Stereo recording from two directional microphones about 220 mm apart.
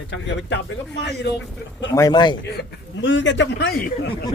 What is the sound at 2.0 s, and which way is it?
Speech, 20° left (ahead or behind).